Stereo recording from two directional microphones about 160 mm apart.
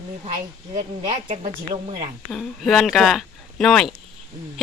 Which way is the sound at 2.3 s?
Centre (ahead or behind).